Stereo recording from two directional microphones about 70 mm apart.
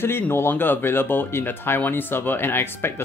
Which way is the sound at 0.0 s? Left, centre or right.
Left.